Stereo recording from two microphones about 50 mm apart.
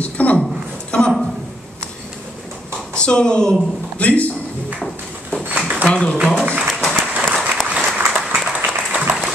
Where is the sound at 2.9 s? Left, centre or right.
Centre.